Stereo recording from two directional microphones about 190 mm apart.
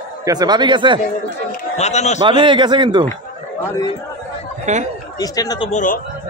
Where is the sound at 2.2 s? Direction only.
25° right (ahead or behind).